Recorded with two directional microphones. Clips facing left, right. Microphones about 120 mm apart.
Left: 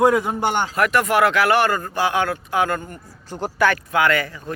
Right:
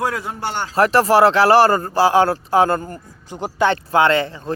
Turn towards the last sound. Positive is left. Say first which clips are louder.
# right 4 dB
turn(degrees=-25)  # may be behind; listen again after turning